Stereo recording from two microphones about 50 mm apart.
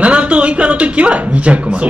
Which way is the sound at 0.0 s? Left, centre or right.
Right.